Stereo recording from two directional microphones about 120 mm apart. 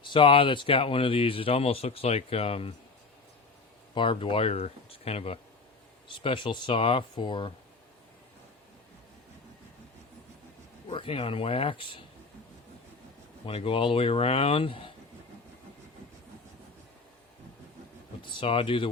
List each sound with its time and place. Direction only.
0.0 s speech: 45° left (ahead or behind)
3.9 s speech: 45° left (ahead or behind)
6.1 s speech: 45° left (ahead or behind)
10.8 s speech: 45° left (ahead or behind)
13.4 s speech: 50° left (ahead or behind)
18.2 s speech: 45° left (ahead or behind)